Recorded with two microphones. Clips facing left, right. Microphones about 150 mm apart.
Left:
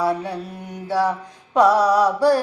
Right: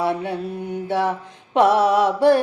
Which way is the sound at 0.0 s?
25° right (ahead or behind).